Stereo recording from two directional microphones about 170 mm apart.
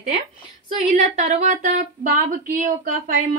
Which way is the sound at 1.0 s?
45° right (ahead or behind).